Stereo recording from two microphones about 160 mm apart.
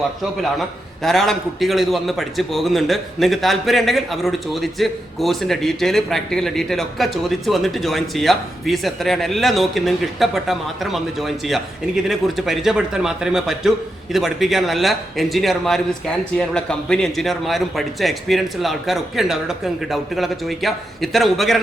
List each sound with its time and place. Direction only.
1.0 s a man's voice: centre (ahead or behind)